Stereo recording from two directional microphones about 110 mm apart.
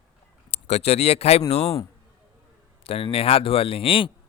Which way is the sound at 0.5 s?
70° left (ahead or behind).